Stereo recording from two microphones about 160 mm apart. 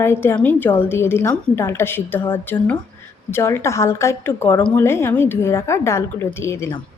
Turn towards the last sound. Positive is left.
turn(degrees=15)  # may be behind; listen again after turning